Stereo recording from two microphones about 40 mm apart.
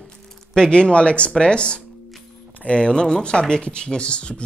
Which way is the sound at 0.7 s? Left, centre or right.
Left.